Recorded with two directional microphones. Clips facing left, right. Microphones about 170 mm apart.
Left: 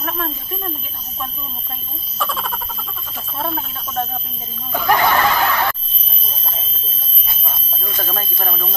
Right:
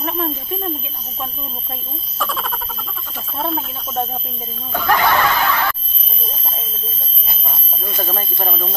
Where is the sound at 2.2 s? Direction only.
Centre (ahead or behind).